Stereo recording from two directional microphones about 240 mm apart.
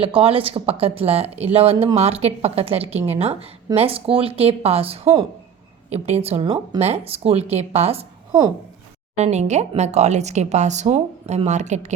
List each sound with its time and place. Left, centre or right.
0.0 s a woman's voice: right